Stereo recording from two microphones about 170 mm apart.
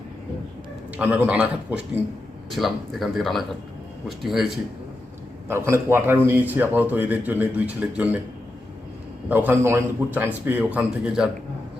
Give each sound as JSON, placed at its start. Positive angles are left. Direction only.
{"t": 0.9, "sound": "a man's voice", "side_deg": -10}
{"t": 5.5, "sound": "a man's voice", "side_deg": -15}
{"t": 9.3, "sound": "a man's voice", "side_deg": -10}